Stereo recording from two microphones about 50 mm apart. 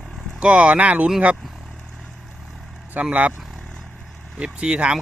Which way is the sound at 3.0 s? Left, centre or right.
Right.